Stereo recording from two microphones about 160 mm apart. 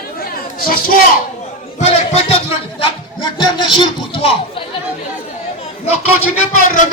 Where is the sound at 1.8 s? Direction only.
45° left (ahead or behind).